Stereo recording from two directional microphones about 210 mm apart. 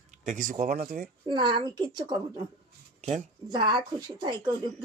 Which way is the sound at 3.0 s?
35° right (ahead or behind).